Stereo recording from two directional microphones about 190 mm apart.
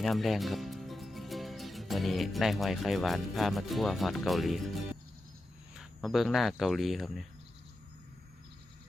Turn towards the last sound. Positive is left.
turn(degrees=0)  # may be behind; listen again after turning